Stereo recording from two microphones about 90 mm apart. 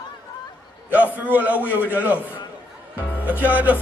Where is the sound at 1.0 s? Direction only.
20° left (ahead or behind).